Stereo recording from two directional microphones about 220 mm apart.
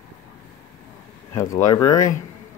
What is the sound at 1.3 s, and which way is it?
Speech, 15° left (ahead or behind).